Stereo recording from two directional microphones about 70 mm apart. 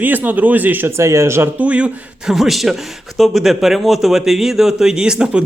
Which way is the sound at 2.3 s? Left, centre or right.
Centre.